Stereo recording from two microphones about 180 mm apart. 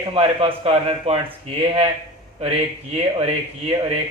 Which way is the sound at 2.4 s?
35° right (ahead or behind).